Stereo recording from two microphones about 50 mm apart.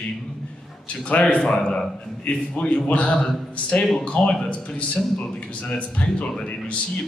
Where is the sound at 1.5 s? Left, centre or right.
Centre.